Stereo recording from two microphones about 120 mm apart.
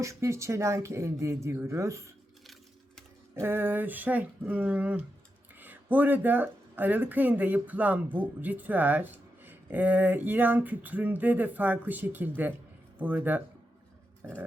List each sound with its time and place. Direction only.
0.0 s speech: 25° right (ahead or behind)
3.3 s speech: 20° right (ahead or behind)